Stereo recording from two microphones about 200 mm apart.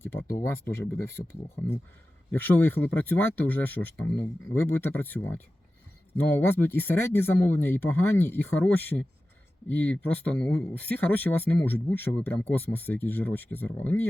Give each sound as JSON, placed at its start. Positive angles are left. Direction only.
{"t": 0.0, "sound": "speech", "side_deg": 10}
{"t": 2.3, "sound": "speech", "side_deg": 10}